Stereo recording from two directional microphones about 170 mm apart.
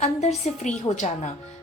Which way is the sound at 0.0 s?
40° left (ahead or behind).